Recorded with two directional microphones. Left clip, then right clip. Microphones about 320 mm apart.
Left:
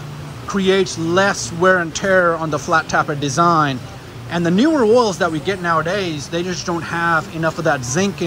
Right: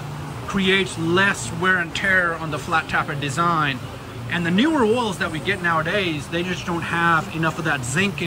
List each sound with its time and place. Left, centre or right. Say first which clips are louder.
0.5 s speech: left 4 dB; centre